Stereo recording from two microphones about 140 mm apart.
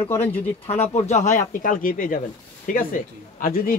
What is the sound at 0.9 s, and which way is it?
A man's voice, 55° left (ahead or behind).